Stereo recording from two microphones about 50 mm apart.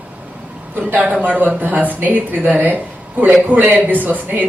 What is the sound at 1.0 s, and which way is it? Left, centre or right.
Speech, right.